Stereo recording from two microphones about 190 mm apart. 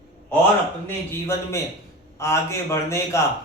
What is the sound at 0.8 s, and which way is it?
A man's voice, 15° left (ahead or behind).